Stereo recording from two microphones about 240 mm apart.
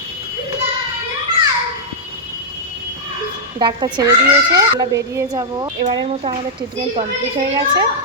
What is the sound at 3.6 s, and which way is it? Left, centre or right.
A woman's voice, centre.